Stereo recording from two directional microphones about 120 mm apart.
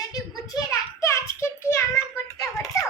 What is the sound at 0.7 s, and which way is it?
Child singing, 25° left (ahead or behind).